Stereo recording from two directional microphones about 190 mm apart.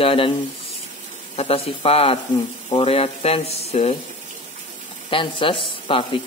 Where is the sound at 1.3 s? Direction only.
35° left (ahead or behind).